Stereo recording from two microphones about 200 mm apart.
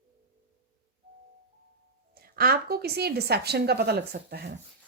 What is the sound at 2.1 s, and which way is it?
Speech, 50° right (ahead or behind).